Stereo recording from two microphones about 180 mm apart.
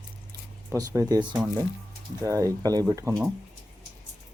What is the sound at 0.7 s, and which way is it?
Speech, 20° right (ahead or behind).